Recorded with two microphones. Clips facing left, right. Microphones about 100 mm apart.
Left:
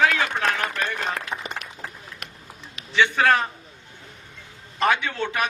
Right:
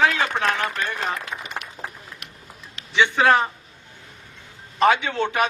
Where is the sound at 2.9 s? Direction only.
20° right (ahead or behind).